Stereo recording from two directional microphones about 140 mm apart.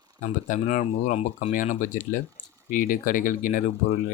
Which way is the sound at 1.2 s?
70° left (ahead or behind).